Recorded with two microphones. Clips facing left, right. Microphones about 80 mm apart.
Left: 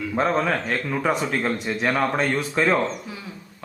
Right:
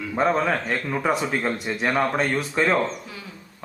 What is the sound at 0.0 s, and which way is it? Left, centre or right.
Speech, centre.